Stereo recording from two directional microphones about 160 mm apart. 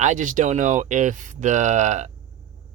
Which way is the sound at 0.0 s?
50° right (ahead or behind).